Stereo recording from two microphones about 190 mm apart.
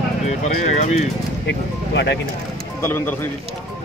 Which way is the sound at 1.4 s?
65° left (ahead or behind).